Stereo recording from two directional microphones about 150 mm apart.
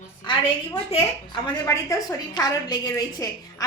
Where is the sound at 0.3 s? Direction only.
35° left (ahead or behind).